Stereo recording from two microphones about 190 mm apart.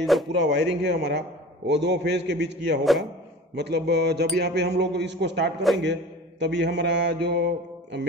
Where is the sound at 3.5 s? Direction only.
60° right (ahead or behind).